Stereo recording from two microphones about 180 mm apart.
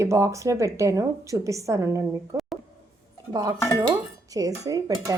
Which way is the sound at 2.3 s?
15° right (ahead or behind).